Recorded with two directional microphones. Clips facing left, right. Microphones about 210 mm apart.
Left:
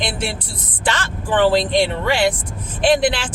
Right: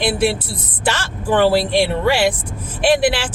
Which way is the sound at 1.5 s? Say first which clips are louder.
Right 1 dB; 10° right (ahead or behind).